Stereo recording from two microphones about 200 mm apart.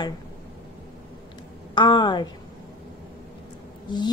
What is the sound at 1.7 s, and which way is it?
Speech, 25° left (ahead or behind).